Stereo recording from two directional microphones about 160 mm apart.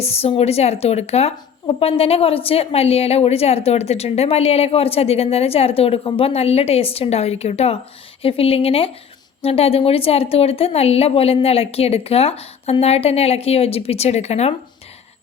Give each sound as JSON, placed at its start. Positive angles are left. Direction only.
{"t": 0.0, "sound": "a woman's voice", "side_deg": 40}